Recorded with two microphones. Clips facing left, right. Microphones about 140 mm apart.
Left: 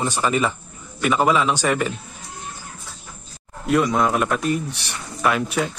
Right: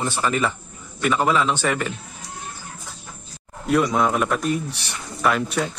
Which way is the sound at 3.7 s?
Centre (ahead or behind).